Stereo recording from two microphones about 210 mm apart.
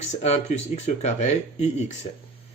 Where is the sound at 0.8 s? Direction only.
35° left (ahead or behind).